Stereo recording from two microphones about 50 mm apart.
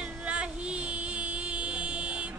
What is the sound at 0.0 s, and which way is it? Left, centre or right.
Music, right.